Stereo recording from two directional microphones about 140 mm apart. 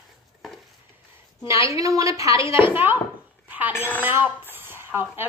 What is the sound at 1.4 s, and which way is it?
A woman's voice, 20° right (ahead or behind).